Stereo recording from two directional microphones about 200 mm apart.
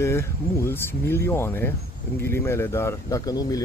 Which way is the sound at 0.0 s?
15° left (ahead or behind).